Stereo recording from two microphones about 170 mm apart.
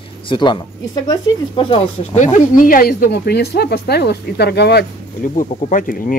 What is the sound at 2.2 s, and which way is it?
Speech, 45° left (ahead or behind).